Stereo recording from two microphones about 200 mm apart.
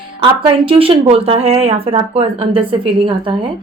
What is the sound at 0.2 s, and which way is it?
A woman's voice, 25° right (ahead or behind).